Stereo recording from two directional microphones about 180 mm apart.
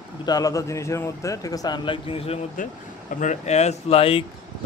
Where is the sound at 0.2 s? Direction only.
20° left (ahead or behind).